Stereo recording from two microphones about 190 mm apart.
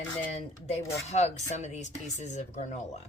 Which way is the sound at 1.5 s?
35° left (ahead or behind).